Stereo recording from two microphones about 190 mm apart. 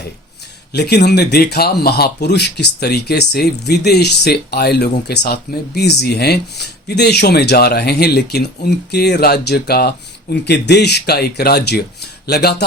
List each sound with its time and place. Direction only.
0.7 s speech: 60° left (ahead or behind)